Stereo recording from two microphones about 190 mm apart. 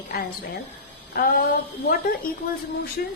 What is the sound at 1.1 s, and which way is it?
Speech, 50° left (ahead or behind).